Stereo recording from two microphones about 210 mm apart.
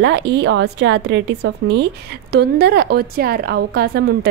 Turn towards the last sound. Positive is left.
turn(degrees=-50)  # may be behind; listen again after turning